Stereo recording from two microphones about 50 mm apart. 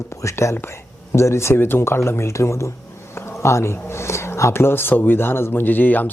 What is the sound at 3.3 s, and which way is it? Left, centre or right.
Speech, left.